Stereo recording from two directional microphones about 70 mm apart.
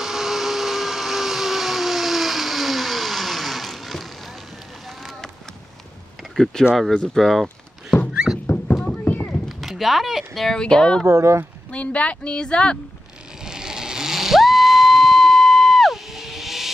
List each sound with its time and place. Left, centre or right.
0.0 s vehicle: centre
6.3 s speech: centre
7.4 s a sound: left
9.5 s speech: centre
11.1 s speech: right
11.7 s speech: centre
13.5 s a sound: centre